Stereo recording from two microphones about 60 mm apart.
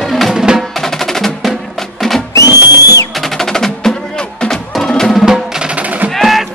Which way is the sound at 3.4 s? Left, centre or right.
Centre.